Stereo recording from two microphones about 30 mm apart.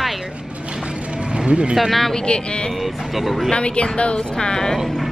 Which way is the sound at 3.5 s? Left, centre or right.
Left.